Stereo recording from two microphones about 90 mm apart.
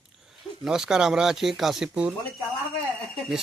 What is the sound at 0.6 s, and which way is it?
Speech, 5° right (ahead or behind).